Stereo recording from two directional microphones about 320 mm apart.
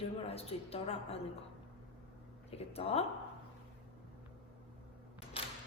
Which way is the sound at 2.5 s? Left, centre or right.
Centre.